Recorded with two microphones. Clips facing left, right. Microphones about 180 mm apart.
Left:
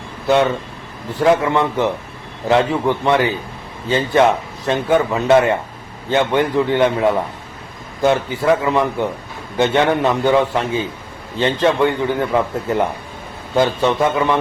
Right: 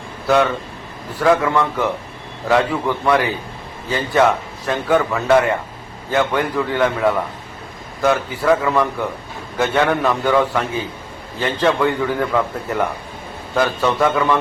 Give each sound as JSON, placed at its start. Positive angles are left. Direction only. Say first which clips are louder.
{"t": 1.2, "sound": "a man's voice", "louder": "left 1 dB", "side_deg": 20}